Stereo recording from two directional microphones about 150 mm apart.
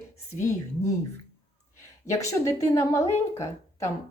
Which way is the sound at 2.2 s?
20° left (ahead or behind).